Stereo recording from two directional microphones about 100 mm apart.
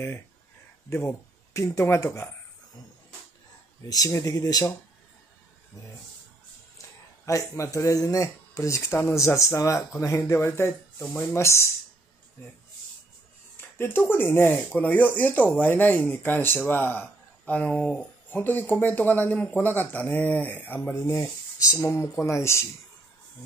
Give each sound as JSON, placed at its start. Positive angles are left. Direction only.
{"t": 0.8, "sound": "speech", "side_deg": 30}
{"t": 3.9, "sound": "speech", "side_deg": 35}
{"t": 7.2, "sound": "speech", "side_deg": 30}
{"t": 13.6, "sound": "speech", "side_deg": 20}